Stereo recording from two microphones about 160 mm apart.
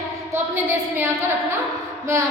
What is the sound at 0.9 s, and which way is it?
Speech, 15° right (ahead or behind).